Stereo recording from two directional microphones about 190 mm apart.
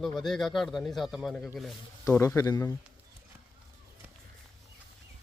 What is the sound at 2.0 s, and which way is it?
Speech, 15° left (ahead or behind).